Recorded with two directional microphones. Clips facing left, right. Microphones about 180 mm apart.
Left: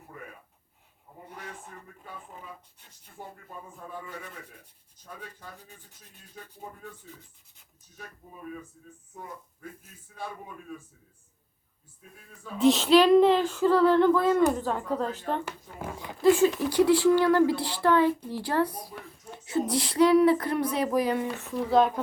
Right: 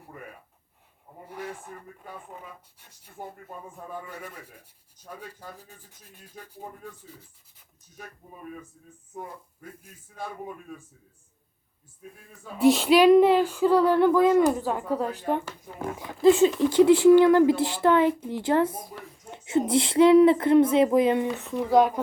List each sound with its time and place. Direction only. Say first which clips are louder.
12.7 s a woman's voice: right 2 dB; 10° right (ahead or behind)